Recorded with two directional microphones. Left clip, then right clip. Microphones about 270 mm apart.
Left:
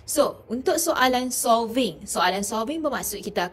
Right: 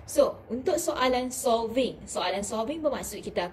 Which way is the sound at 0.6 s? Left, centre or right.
Left.